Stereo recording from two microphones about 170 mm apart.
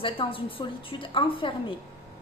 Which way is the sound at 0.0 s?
30° left (ahead or behind).